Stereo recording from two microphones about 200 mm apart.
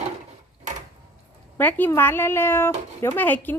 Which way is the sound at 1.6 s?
10° left (ahead or behind).